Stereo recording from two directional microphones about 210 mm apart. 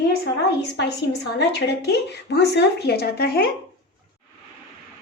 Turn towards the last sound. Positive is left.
turn(degrees=45)  # may be behind; listen again after turning